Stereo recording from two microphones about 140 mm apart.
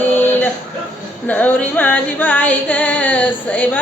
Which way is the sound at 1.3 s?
10° left (ahead or behind).